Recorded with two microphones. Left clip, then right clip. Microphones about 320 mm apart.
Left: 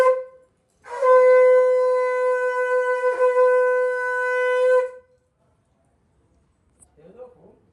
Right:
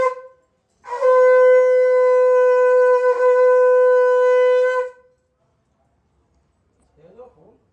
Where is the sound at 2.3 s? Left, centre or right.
Centre.